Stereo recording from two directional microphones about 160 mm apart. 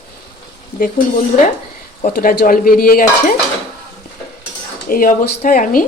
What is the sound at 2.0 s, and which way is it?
Speech, 60° left (ahead or behind).